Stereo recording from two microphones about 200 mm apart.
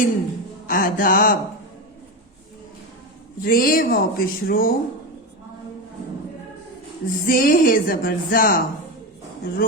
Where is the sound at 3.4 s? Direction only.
45° left (ahead or behind).